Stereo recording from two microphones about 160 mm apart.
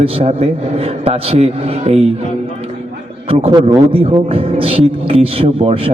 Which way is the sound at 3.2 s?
35° right (ahead or behind).